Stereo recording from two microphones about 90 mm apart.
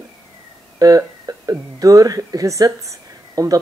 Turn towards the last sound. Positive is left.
turn(degrees=-40)  # may be behind; listen again after turning